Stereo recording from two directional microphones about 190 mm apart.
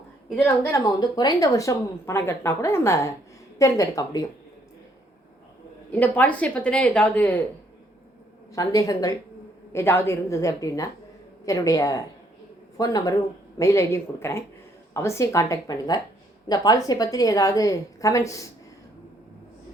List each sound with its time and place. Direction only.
0.3 s a woman's voice: 10° left (ahead or behind)
5.9 s a woman's voice: 10° left (ahead or behind)
8.5 s a woman's voice: 20° left (ahead or behind)